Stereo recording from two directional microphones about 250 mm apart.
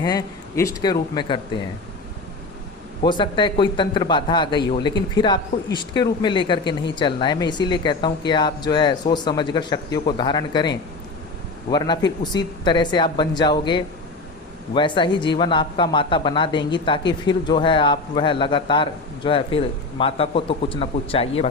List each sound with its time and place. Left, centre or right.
0.0 s speech: centre
3.0 s a man's voice: centre